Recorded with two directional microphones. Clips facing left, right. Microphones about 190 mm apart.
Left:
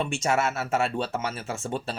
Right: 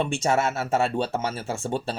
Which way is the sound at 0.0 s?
25° right (ahead or behind).